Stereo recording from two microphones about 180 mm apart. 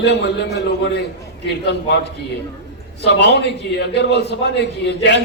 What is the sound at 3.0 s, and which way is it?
A man's voice, 70° left (ahead or behind).